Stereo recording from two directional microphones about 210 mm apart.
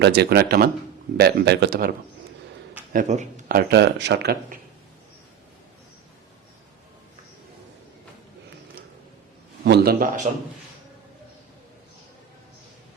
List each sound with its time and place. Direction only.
0.0 s speech: 50° right (ahead or behind)
9.6 s speech: 50° right (ahead or behind)